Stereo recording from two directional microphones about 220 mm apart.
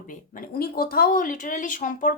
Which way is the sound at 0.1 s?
40° left (ahead or behind).